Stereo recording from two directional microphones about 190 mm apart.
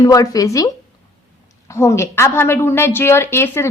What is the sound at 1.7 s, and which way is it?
A woman's voice, 15° left (ahead or behind).